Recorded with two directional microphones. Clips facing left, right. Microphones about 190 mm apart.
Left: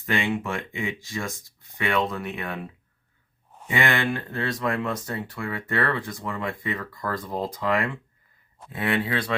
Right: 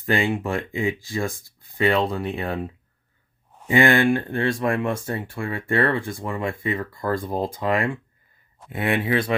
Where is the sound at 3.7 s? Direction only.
30° right (ahead or behind).